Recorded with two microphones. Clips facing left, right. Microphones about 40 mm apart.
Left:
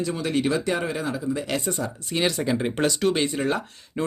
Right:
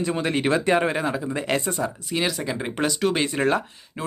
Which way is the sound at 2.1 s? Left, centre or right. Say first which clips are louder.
Left 5 dB; centre.